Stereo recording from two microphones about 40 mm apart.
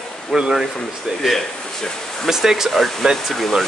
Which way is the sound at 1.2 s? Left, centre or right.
Centre.